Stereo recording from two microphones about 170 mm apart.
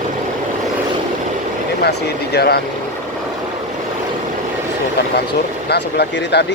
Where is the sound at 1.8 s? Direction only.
75° left (ahead or behind).